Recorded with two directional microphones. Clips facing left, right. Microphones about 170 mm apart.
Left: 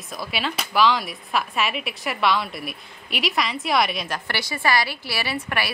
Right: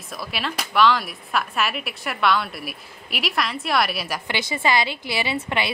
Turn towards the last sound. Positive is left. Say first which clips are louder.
# right 2 dB
turn(degrees=-20)  # may be behind; listen again after turning